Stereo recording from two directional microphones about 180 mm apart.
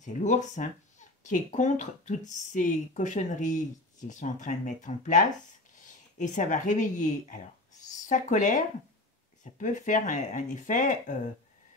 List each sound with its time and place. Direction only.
0.0 s speech: 45° left (ahead or behind)